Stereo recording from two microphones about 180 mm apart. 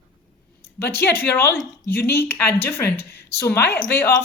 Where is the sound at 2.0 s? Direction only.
15° left (ahead or behind).